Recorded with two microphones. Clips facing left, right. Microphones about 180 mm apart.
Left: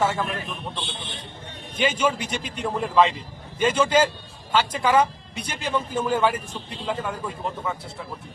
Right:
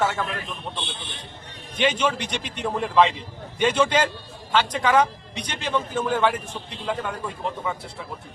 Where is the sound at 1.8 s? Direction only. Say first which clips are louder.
Even; 5° left (ahead or behind).